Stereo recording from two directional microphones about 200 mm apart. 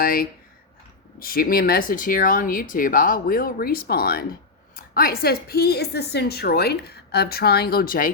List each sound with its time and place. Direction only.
0.0 s a woman's voice: 45° left (ahead or behind)